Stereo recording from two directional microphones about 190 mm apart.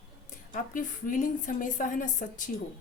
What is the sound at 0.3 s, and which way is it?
A woman's voice, 45° left (ahead or behind).